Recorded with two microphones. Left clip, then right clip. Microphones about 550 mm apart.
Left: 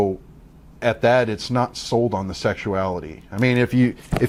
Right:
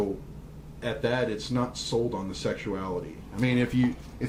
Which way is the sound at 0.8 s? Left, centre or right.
Left.